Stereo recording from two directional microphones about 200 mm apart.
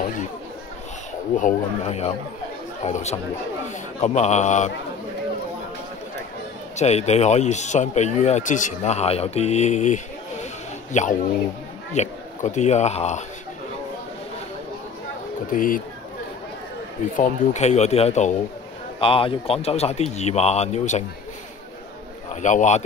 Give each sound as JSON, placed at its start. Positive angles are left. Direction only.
{"t": 1.3, "sound": "speech", "side_deg": 35}
{"t": 6.8, "sound": "speech", "side_deg": 35}
{"t": 15.5, "sound": "speech", "side_deg": 45}
{"t": 17.2, "sound": "speech", "side_deg": 35}
{"t": 22.3, "sound": "speech", "side_deg": 35}